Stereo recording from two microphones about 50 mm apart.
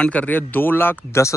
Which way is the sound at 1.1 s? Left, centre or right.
Left.